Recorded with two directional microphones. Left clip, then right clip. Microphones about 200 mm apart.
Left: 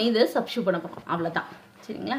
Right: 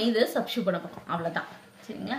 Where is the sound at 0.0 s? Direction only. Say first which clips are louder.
Left 3 dB; 40° left (ahead or behind).